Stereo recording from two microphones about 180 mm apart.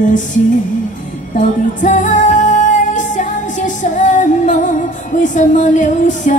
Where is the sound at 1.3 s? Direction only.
45° left (ahead or behind).